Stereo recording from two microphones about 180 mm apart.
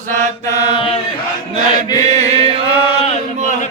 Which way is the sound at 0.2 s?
40° right (ahead or behind).